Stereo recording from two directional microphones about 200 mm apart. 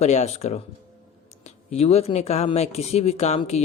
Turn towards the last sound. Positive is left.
turn(degrees=35)  # may be behind; listen again after turning